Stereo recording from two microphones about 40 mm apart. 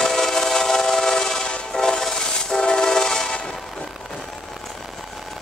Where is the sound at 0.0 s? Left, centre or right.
Centre.